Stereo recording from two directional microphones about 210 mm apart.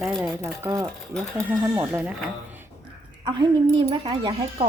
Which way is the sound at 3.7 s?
20° right (ahead or behind).